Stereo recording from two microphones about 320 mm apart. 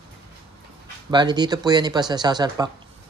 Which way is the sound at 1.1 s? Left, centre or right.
Centre.